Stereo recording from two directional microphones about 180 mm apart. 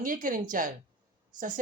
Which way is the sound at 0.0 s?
45° right (ahead or behind).